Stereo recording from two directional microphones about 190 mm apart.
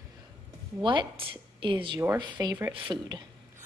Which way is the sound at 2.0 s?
15° right (ahead or behind).